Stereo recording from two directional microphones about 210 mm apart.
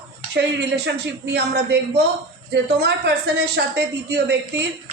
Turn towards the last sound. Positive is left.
turn(degrees=-55)  # may be behind; listen again after turning